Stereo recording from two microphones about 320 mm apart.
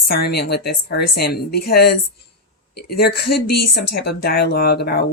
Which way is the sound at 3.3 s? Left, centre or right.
Left.